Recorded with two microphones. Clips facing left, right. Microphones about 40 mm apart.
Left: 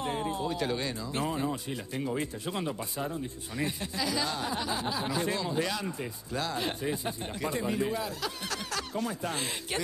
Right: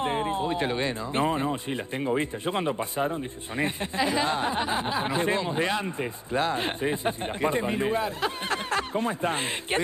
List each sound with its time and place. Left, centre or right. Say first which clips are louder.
0.0 s speech: right 5 dB; right